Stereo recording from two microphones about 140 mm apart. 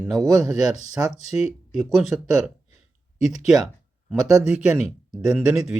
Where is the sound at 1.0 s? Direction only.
15° right (ahead or behind).